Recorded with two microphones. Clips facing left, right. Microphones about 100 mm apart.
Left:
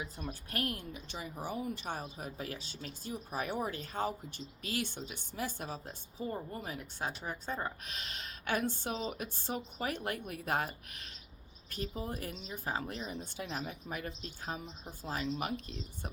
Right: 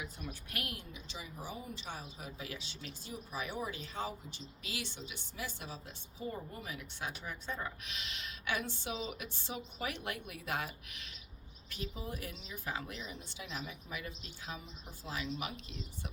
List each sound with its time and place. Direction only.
0.0 s a woman's voice: 30° left (ahead or behind)
0.6 s speech: 45° left (ahead or behind)
13.1 s speech: 50° left (ahead or behind)